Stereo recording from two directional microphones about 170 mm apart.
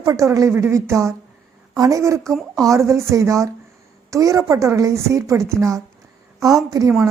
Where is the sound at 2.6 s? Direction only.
20° right (ahead or behind).